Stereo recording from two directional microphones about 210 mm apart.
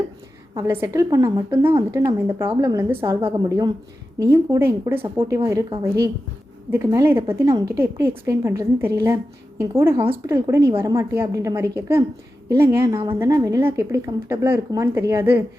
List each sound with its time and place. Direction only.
0.5 s a woman's voice: 15° right (ahead or behind)
6.7 s a woman's voice: 10° right (ahead or behind)